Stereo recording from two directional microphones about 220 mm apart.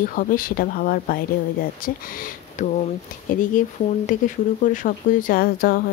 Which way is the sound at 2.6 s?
35° left (ahead or behind).